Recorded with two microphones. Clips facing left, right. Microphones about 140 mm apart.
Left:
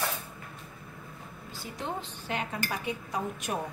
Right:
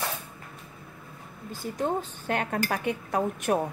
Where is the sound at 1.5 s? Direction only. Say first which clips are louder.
Right 8 dB; 45° right (ahead or behind).